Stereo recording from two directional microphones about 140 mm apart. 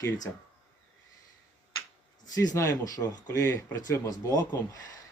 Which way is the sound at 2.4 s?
25° left (ahead or behind).